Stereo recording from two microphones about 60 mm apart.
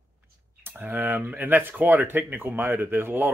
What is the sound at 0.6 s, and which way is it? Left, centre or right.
Speech, right.